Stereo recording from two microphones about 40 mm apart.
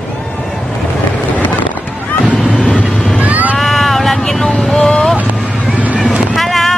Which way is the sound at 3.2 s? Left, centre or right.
Right.